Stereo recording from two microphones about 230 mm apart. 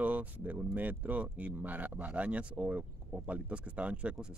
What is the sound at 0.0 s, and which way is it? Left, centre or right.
Speech, centre.